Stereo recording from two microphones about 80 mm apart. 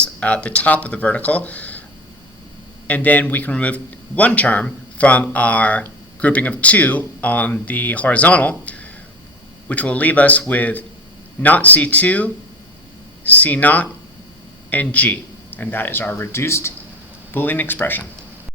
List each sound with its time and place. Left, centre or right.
0.0 s speech: centre
2.8 s a man's voice: centre